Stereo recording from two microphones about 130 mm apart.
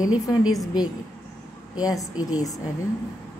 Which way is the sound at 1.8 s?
30° left (ahead or behind).